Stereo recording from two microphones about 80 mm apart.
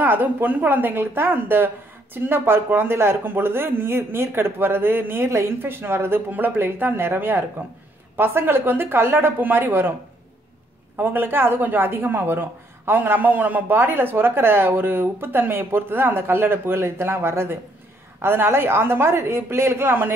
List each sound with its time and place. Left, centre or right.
0.0 s speech: right
11.0 s a woman's voice: right